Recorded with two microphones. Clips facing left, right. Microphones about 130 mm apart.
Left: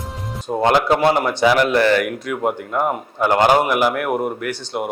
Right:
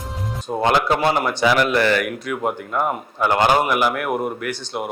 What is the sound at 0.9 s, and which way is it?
Speech, 20° left (ahead or behind).